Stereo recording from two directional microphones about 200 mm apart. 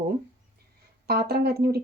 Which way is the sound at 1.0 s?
50° right (ahead or behind).